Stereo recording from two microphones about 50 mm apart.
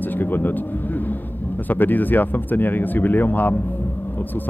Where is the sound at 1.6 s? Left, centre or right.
Left.